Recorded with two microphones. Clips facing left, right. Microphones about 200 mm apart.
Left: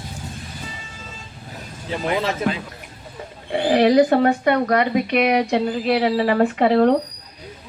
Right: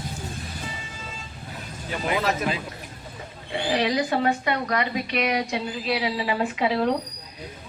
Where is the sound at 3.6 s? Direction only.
55° left (ahead or behind).